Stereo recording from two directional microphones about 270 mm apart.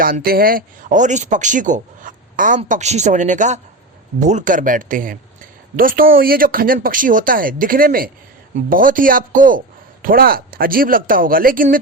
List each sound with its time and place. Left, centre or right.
0.0 s a man's voice: right